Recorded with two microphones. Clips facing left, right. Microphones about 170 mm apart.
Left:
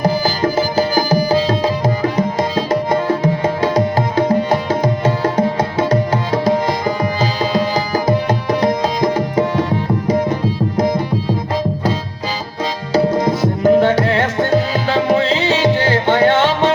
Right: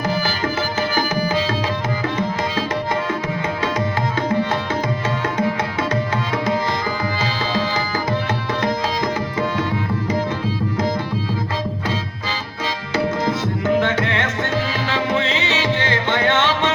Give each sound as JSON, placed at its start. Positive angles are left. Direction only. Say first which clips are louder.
{"t": 0.0, "sound": "tabla", "louder": "left 6 dB", "side_deg": 35}
{"t": 4.3, "sound": "music", "louder": "left 5 dB", "side_deg": 35}
{"t": 8.3, "sound": "tabla", "louder": "left 6 dB", "side_deg": 35}
{"t": 13.1, "sound": "tabla", "louder": "left 6 dB", "side_deg": 15}
{"t": 13.6, "sound": "music", "louder": "left 8 dB", "side_deg": 35}